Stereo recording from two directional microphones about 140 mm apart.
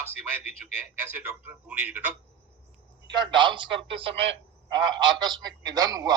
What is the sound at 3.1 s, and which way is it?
A man's voice, 35° right (ahead or behind).